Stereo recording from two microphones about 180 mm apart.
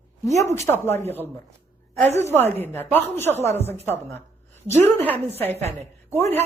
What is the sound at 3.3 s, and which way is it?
Speech, 40° right (ahead or behind).